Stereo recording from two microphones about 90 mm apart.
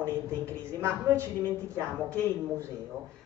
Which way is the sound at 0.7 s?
30° right (ahead or behind).